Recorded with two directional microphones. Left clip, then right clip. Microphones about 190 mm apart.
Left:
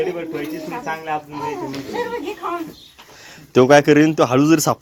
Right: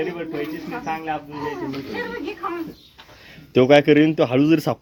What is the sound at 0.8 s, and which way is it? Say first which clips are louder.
Speech: left 2 dB; 40° left (ahead or behind).